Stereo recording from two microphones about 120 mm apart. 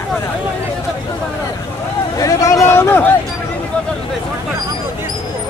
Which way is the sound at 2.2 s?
25° left (ahead or behind).